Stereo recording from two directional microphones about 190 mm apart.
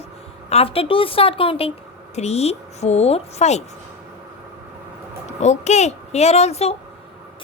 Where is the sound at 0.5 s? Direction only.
30° left (ahead or behind).